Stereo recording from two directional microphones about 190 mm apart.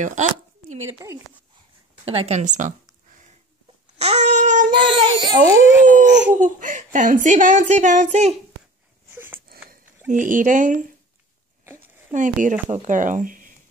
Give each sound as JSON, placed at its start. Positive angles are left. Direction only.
{"t": 0.0, "sound": "speech", "side_deg": -40}
{"t": 2.0, "sound": "speech", "side_deg": -30}
{"t": 4.0, "sound": "speech", "side_deg": -35}
{"t": 4.7, "sound": "speech", "side_deg": -20}
{"t": 5.9, "sound": "speech", "side_deg": -40}
{"t": 9.1, "sound": "a sound", "side_deg": -10}
{"t": 9.5, "sound": "a sound", "side_deg": -45}
{"t": 11.6, "sound": "a sound", "side_deg": -15}
{"t": 12.1, "sound": "speech", "side_deg": -40}